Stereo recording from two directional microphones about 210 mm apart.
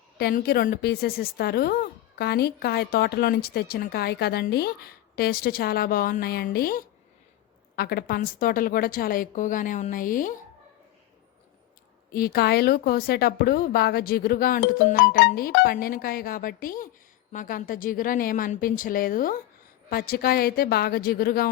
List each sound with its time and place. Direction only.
0.2 s a woman's voice: 45° left (ahead or behind)
12.1 s a woman's voice: 45° left (ahead or behind)